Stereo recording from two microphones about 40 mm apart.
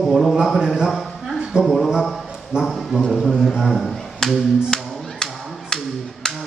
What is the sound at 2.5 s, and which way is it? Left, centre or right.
Speech, right.